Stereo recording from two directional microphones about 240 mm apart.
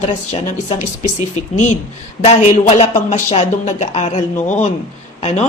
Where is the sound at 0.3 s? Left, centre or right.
Left.